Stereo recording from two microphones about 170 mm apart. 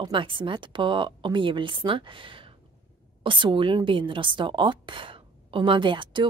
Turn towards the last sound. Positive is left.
turn(degrees=-30)  # may be behind; listen again after turning